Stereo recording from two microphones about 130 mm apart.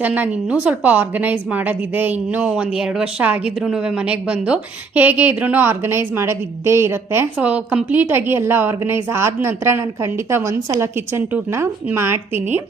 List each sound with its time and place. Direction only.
0.0 s speech: 10° right (ahead or behind)